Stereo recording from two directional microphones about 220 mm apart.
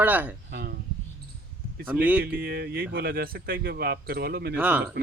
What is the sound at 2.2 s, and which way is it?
Speech, 45° right (ahead or behind).